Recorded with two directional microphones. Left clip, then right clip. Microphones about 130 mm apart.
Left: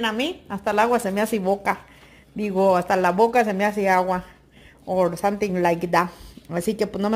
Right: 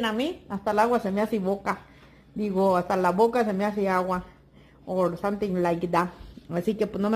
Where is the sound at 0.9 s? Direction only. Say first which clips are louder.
Left 3 dB; 30° left (ahead or behind).